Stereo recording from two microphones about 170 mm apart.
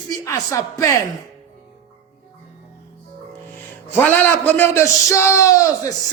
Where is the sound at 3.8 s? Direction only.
10° left (ahead or behind).